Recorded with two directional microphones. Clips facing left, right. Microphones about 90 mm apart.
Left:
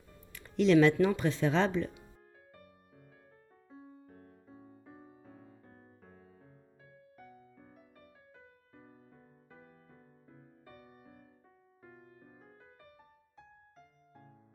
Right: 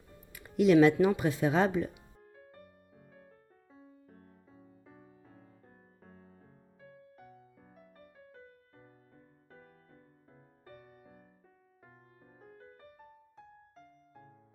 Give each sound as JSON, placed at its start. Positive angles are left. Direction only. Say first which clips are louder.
{"t": 0.3, "sound": "speech", "louder": "right 2 dB", "side_deg": -10}
{"t": 4.9, "sound": "music", "louder": "left 3 dB", "side_deg": 15}
{"t": 10.8, "sound": "music", "louder": "even", "side_deg": 10}